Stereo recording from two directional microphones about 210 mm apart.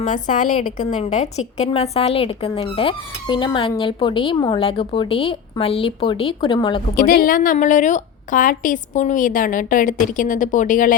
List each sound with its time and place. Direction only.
0.0 s a woman's voice: 35° left (ahead or behind)
6.9 s a woman's voice: 45° left (ahead or behind)